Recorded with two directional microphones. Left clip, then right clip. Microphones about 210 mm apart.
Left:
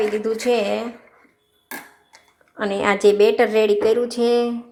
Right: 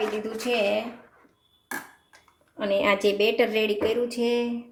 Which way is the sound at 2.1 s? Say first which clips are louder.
Left 5 dB; 20° left (ahead or behind).